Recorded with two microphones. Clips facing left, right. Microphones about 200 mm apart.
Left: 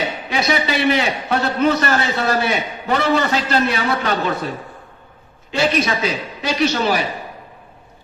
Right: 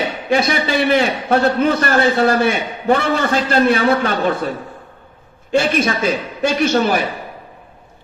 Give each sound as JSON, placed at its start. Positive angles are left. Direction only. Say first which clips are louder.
{"t": 0.3, "sound": "a man's voice", "louder": "right 4 dB", "side_deg": -50}
{"t": 5.5, "sound": "a man's voice", "louder": "right 2 dB", "side_deg": -50}